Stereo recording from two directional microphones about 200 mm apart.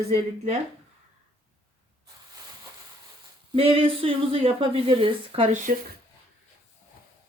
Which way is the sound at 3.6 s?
25° right (ahead or behind).